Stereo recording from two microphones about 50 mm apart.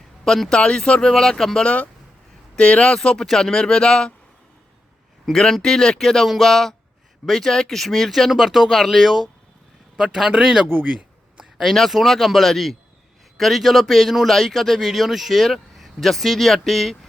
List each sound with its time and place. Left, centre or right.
0.3 s speech: centre
2.6 s speech: left
5.2 s a man's voice: centre
11.5 s speech: centre